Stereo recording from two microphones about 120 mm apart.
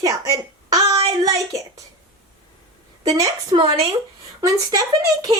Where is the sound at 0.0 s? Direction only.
30° right (ahead or behind).